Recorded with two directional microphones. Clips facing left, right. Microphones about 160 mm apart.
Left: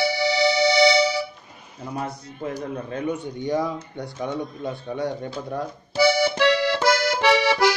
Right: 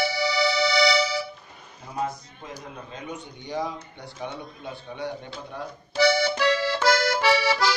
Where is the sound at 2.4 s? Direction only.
55° left (ahead or behind).